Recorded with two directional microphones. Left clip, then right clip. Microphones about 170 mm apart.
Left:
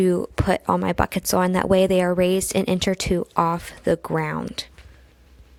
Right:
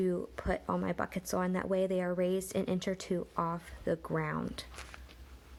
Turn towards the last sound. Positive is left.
turn(degrees=45)  # may be behind; listen again after turning